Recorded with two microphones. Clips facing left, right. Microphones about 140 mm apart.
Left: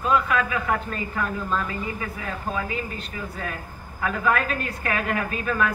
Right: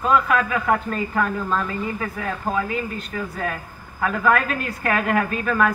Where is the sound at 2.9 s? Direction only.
50° right (ahead or behind).